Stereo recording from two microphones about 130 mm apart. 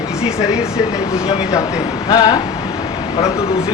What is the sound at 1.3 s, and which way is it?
A woman's voice, 30° left (ahead or behind).